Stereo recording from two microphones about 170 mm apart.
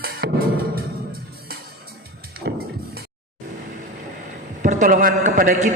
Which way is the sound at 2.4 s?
65° right (ahead or behind).